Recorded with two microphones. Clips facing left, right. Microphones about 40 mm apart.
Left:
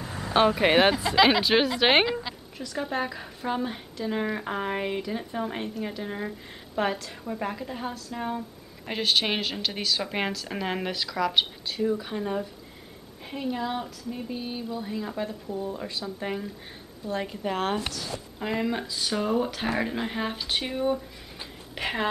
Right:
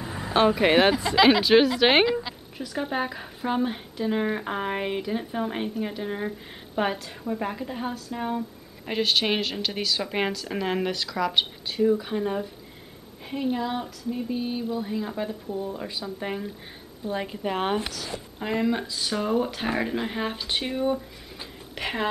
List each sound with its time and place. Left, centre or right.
0.0 s vehicle: centre
0.3 s a woman's voice: centre
13.6 s a woman's voice: centre